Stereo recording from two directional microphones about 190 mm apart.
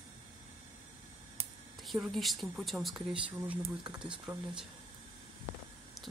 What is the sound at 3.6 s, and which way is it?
Speech, 25° right (ahead or behind).